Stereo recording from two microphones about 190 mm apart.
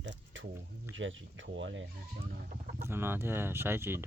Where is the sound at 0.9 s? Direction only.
80° right.